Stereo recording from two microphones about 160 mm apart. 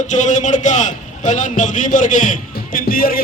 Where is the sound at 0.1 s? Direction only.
50° left (ahead or behind).